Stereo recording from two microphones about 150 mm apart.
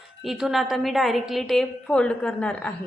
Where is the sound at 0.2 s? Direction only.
Centre (ahead or behind).